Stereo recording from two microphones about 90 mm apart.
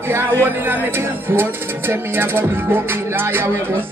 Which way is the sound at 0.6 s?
25° right (ahead or behind).